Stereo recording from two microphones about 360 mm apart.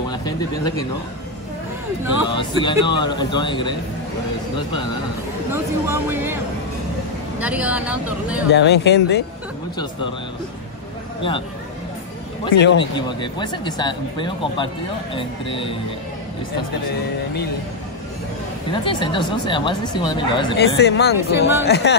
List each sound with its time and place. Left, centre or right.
0.1 s speech: centre
2.2 s speech: centre
5.5 s speech: centre
7.3 s speech: centre
8.5 s speech: left
12.5 s speech: left
12.9 s speech: centre
18.7 s speech: centre
20.5 s speech: left